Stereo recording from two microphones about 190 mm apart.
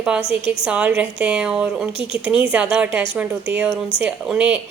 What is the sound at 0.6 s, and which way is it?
Speech, 5° right (ahead or behind).